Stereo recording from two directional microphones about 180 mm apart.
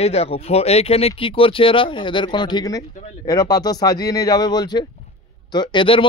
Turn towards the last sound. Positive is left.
turn(degrees=30)  # may be behind; listen again after turning